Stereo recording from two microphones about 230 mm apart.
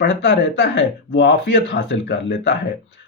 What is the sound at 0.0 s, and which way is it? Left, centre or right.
Speech, left.